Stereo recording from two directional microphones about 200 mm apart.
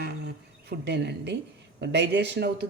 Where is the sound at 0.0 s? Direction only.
55° right (ahead or behind).